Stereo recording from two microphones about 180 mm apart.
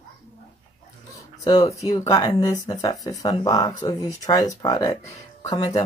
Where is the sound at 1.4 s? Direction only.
20° left (ahead or behind).